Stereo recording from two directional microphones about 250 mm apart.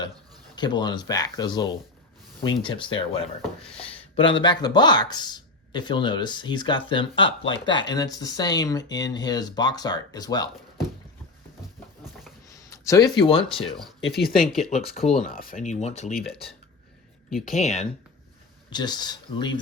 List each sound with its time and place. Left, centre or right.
0.5 s speech: centre
12.7 s speech: centre
14.3 s speech: centre
15.1 s speech: left
17.5 s speech: left
18.7 s speech: centre